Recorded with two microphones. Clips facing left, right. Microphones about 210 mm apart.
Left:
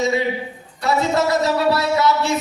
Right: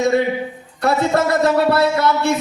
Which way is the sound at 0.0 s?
55° right (ahead or behind).